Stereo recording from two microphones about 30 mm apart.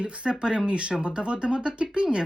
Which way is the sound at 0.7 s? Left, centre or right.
Right.